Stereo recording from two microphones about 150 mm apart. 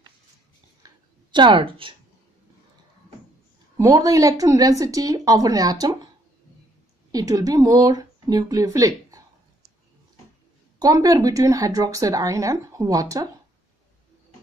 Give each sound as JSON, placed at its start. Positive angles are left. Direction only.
{"t": 0.8, "sound": "a sound", "side_deg": -30}
{"t": 3.7, "sound": "speech", "side_deg": -25}
{"t": 7.1, "sound": "speech", "side_deg": -25}
{"t": 10.8, "sound": "speech", "side_deg": -25}